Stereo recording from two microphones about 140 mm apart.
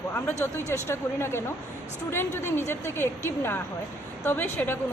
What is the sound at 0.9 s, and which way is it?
Speech, 15° left (ahead or behind).